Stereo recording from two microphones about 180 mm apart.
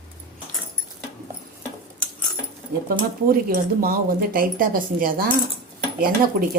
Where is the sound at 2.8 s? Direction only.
55° right (ahead or behind).